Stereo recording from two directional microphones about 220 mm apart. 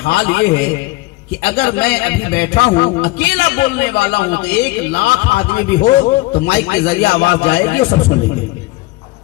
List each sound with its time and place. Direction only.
0.0 s a man's voice: 50° left (ahead or behind)